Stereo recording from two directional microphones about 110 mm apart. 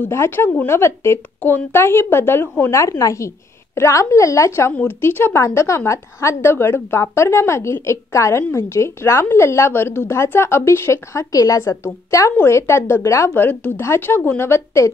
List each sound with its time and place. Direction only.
0.0 s a woman's voice: 20° left (ahead or behind)
2.7 s a woman's voice: 30° left (ahead or behind)